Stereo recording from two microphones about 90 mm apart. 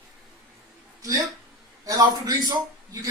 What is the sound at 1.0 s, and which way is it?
A man's voice, 40° right (ahead or behind).